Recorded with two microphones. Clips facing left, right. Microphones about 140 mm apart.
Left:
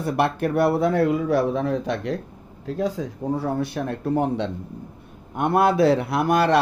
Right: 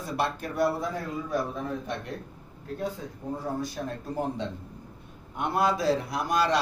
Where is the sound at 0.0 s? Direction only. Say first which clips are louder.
Left 8 dB; 60° left (ahead or behind).